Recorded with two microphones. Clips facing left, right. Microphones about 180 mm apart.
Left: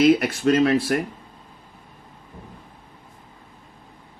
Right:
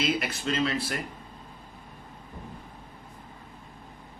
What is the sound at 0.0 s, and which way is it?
Speech, 50° left (ahead or behind).